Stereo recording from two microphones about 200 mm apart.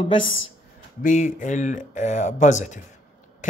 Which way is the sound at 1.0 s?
40° left (ahead or behind).